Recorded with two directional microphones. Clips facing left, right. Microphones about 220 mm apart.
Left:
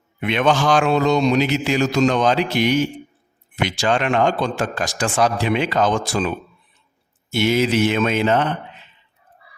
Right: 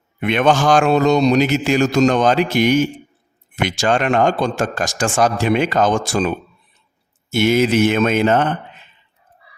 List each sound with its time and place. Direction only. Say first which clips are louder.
0.2 s a man's voice: right 3 dB; 50° right (ahead or behind)